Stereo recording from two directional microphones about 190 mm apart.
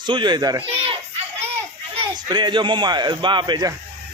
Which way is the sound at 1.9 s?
25° right (ahead or behind).